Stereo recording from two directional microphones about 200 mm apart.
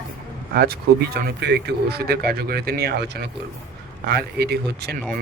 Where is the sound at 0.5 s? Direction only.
50° right (ahead or behind).